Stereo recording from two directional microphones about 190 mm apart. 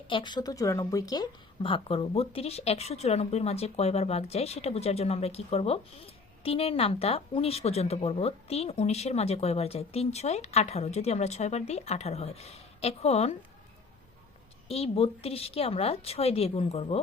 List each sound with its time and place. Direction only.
0.1 s speech: 25° left (ahead or behind)
14.7 s speech: 30° left (ahead or behind)